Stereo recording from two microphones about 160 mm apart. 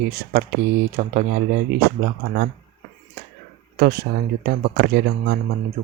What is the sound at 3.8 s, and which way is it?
Speech, 75° right (ahead or behind).